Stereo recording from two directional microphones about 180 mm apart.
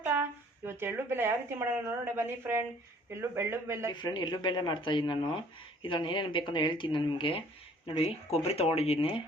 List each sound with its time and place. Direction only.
0.0 s a man's voice: 10° right (ahead or behind)
3.9 s speech: 25° left (ahead or behind)